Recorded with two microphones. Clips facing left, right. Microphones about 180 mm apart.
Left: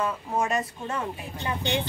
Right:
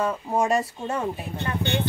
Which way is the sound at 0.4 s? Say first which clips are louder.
Right 4 dB; 30° right (ahead or behind).